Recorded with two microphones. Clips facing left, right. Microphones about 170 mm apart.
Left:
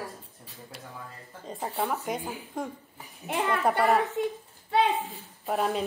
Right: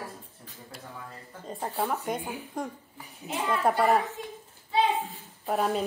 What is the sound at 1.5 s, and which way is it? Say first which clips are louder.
Speech: even; centre (ahead or behind).